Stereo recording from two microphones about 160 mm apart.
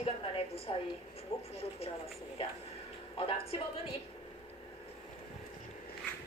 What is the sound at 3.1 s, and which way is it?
Speech, 35° left (ahead or behind).